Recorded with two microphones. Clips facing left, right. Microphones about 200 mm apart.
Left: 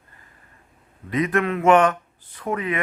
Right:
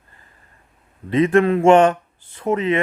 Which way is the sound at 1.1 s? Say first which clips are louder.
Right 7 dB; 30° right (ahead or behind).